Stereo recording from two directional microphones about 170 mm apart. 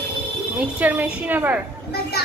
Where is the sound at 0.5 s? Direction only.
10° right (ahead or behind).